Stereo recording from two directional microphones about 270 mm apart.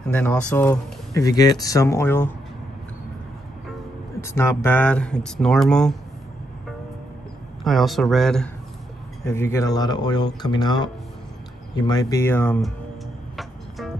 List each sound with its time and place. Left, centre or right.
0.1 s speech: centre
4.2 s speech: centre
7.6 s speech: centre